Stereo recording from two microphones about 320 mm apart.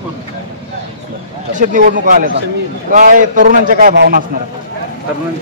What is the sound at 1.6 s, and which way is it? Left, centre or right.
Speech, right.